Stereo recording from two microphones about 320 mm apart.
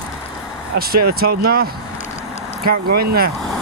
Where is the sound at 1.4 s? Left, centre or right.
Right.